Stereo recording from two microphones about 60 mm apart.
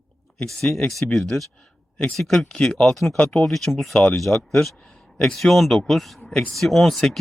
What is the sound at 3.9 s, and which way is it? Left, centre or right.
Speech, centre.